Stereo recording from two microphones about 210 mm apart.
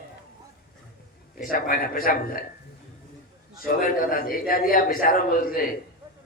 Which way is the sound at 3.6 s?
40° left (ahead or behind).